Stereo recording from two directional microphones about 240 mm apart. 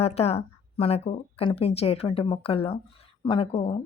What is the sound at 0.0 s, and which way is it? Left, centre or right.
A woman's voice, left.